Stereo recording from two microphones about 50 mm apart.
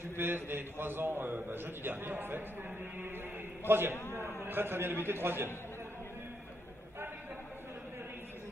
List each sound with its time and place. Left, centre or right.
0.0 s a man's voice: right
3.6 s a man's voice: right
3.9 s a man's voice: left
4.5 s a man's voice: right